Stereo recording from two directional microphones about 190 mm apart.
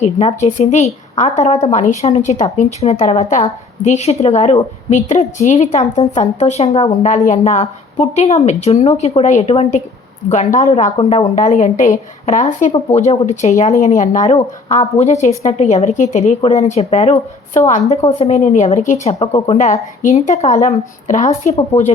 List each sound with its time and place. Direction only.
0.0 s a woman's voice: 35° left (ahead or behind)